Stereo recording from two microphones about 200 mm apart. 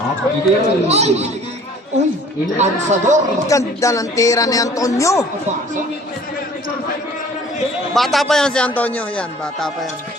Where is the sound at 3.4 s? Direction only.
15° left (ahead or behind).